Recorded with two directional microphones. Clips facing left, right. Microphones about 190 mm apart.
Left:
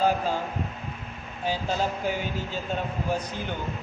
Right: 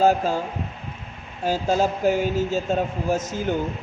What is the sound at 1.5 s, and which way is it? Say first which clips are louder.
A man's voice: right 6 dB; 45° right (ahead or behind).